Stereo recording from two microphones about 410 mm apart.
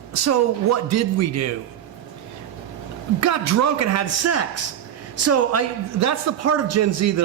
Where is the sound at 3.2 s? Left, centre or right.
Right.